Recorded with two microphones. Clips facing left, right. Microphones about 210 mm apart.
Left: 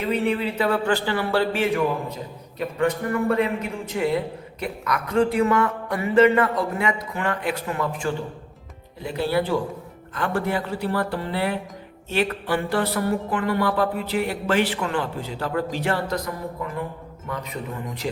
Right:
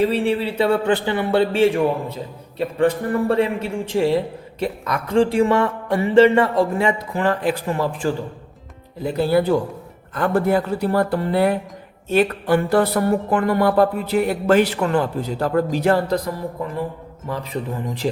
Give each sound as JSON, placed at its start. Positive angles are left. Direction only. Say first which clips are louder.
{"t": 0.0, "sound": "speech", "louder": "right 4 dB", "side_deg": -30}
{"t": 10.2, "sound": "music", "louder": "right 6 dB", "side_deg": -40}
{"t": 15.7, "sound": "speech", "louder": "right 7 dB", "side_deg": -40}